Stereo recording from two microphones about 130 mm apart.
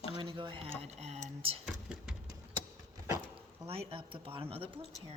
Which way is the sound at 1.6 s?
5° right (ahead or behind).